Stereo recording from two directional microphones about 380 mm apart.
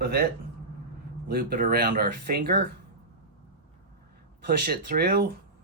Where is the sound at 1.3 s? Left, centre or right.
Right.